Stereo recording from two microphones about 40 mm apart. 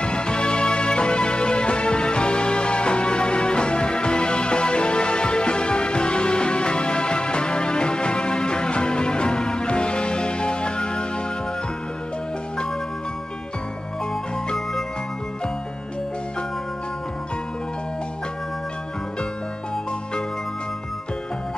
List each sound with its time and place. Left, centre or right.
0.0 s music: left